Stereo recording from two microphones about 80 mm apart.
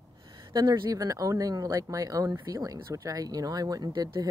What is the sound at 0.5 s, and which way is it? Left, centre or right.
Speech, right.